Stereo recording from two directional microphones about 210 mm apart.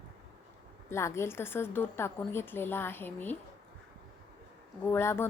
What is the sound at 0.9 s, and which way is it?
A woman's voice, 15° left (ahead or behind).